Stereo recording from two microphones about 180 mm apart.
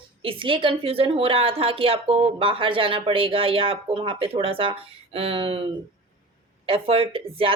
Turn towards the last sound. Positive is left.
turn(degrees=-30)  # may be behind; listen again after turning